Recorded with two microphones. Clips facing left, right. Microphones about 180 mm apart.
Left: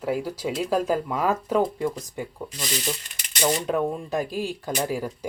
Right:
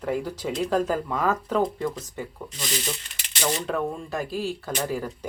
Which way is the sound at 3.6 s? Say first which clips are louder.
Left 3 dB; 15° left (ahead or behind).